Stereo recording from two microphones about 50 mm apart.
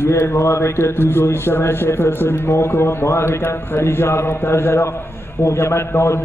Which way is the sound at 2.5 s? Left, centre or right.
Left.